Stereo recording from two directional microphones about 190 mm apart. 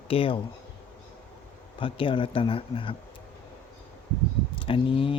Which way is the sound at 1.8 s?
25° left (ahead or behind).